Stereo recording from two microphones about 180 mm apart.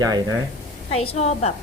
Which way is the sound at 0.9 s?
40° left (ahead or behind).